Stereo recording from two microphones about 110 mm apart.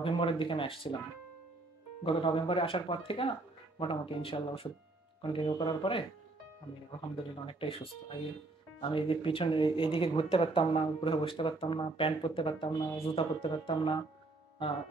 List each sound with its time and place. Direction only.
0.0 s speech: 50° left (ahead or behind)
2.0 s speech: 50° left (ahead or behind)
7.4 s speech: 55° left (ahead or behind)